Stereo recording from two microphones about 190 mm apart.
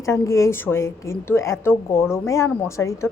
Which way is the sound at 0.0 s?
15° left (ahead or behind).